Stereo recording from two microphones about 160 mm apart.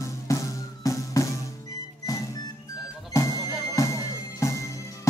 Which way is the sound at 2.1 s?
20° left (ahead or behind).